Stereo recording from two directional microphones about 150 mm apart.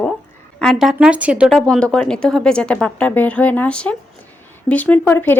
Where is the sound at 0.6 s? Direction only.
Centre (ahead or behind).